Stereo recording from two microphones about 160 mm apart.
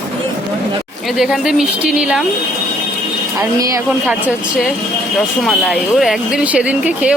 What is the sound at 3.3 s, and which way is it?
Speech, 20° right (ahead or behind).